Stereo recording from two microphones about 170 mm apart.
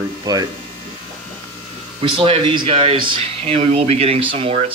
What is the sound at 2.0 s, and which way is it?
Speech, 30° right (ahead or behind).